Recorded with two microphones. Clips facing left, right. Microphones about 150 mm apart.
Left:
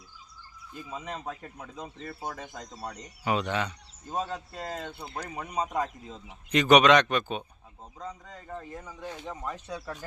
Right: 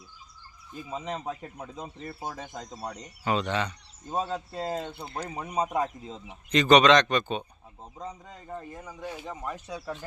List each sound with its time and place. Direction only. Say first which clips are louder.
0.9 s speech: right 3 dB; 20° right (ahead or behind)
3.2 s speech: right 1 dB; 10° left (ahead or behind)
4.2 s speech: right 3 dB; 25° right (ahead or behind)
6.2 s speech: right 1 dB; 10° left (ahead or behind)
8.0 s speech: right 1 dB; 20° right (ahead or behind)
8.4 s speech: right 1 dB; 10° right (ahead or behind)